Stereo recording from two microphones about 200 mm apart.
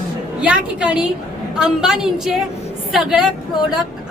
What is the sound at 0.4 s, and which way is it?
A woman's voice, 5° right (ahead or behind).